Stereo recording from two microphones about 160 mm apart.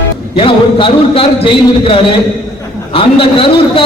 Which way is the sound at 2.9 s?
35° left (ahead or behind).